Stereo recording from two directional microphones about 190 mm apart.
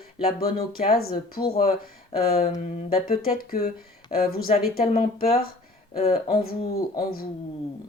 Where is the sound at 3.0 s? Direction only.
50° left (ahead or behind).